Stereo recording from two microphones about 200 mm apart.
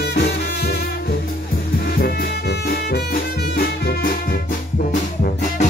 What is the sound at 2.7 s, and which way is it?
Music, 50° left (ahead or behind).